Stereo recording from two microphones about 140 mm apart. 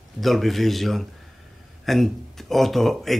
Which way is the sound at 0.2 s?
Centre (ahead or behind).